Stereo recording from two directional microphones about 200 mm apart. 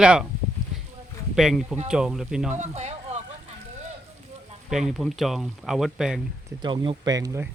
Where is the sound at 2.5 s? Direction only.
35° right (ahead or behind).